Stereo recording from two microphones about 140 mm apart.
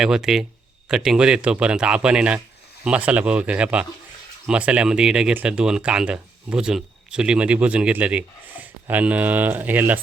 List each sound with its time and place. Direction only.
0.0 s speech: 5° right (ahead or behind)